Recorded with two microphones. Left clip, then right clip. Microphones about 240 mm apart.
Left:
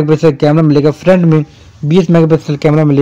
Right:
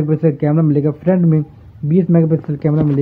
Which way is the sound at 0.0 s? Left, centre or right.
Left.